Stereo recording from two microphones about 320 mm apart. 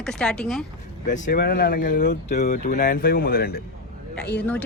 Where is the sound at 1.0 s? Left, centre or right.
Left.